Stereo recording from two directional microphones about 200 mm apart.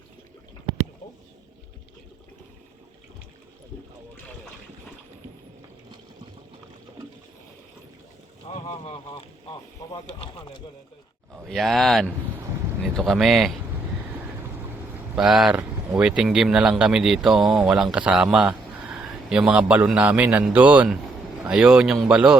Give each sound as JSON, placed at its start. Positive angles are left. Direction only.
{"t": 8.4, "sound": "boat", "side_deg": 30}
{"t": 9.5, "sound": "speech", "side_deg": 25}
{"t": 11.4, "sound": "speech", "side_deg": 0}
{"t": 15.1, "sound": "speech", "side_deg": 0}